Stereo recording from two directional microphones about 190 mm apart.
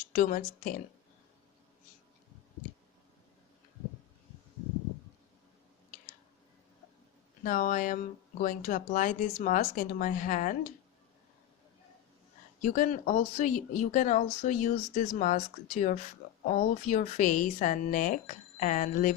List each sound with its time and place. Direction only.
0.1 s speech: 45° left (ahead or behind)
7.4 s speech: 45° left (ahead or behind)
12.6 s a woman's voice: 45° left (ahead or behind)